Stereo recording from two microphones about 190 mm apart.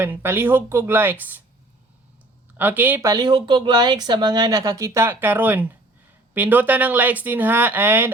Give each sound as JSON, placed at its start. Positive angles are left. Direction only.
{"t": 0.0, "sound": "speech", "side_deg": -10}
{"t": 2.6, "sound": "speech", "side_deg": -10}